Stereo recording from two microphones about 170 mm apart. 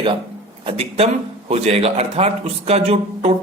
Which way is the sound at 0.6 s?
35° right (ahead or behind).